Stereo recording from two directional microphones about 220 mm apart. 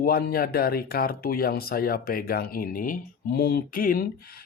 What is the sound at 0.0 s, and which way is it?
Speech, 45° left (ahead or behind).